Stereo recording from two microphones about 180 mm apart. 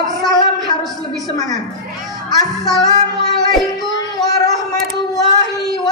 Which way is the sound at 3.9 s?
20° left (ahead or behind).